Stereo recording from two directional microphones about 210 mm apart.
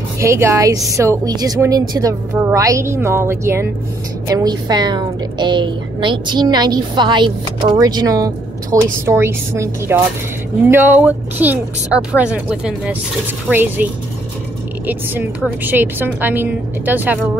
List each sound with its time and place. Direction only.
0.2 s a woman's voice: 15° right (ahead or behind)
14.9 s a woman's voice: 10° right (ahead or behind)